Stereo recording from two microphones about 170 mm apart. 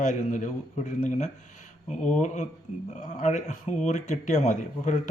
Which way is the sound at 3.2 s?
45° left (ahead or behind).